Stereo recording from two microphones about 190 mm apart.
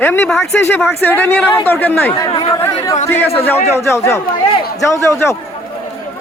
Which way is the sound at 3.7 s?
15° left (ahead or behind).